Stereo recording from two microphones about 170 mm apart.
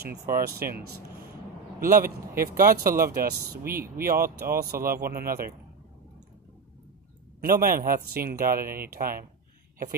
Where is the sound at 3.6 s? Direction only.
15° right (ahead or behind).